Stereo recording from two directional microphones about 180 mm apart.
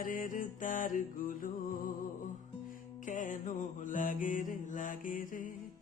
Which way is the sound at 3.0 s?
45° left (ahead or behind).